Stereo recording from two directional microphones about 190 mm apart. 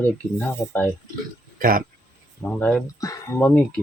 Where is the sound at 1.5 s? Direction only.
50° right (ahead or behind).